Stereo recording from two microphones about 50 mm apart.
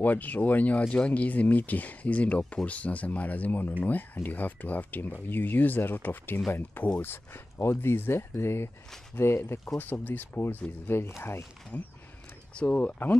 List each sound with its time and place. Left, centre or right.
0.0 s speech: left
9.8 s speech: left
10.9 s speech: left
11.7 s speech: left